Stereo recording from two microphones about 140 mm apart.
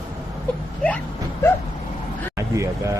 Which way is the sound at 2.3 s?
20° right (ahead or behind).